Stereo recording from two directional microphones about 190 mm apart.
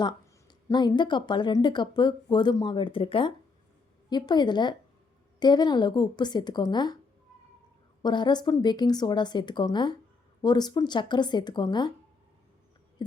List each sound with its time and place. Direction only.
0.0 s speech: 25° left (ahead or behind)
8.0 s speech: 25° left (ahead or behind)
13.0 s speech: 25° left (ahead or behind)